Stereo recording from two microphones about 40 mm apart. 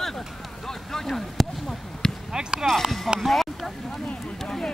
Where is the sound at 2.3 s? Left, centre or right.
Centre.